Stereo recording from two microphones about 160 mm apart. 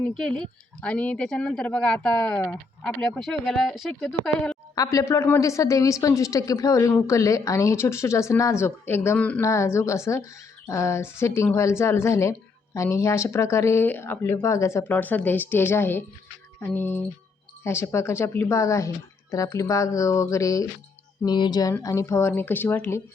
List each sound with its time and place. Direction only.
0.0 s speech: 5° left (ahead or behind)
4.7 s a woman's voice: 20° left (ahead or behind)